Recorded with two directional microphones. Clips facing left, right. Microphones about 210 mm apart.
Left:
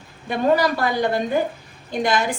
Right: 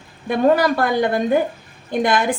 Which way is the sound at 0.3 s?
50° right (ahead or behind).